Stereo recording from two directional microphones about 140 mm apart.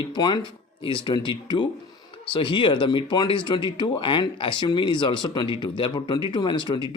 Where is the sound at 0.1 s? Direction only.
30° left (ahead or behind).